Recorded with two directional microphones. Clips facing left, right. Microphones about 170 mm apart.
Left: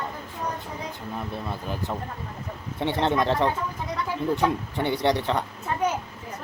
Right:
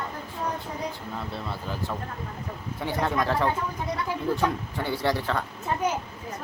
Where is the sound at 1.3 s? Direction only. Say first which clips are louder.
Left 2 dB; 15° left (ahead or behind).